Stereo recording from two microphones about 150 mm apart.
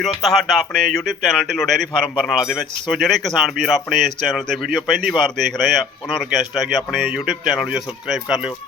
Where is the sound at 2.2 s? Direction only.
Centre (ahead or behind).